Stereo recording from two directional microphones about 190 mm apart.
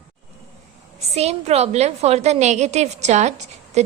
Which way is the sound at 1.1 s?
35° right (ahead or behind).